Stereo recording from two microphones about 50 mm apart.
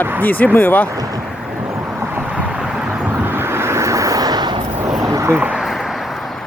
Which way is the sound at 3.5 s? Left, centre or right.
Right.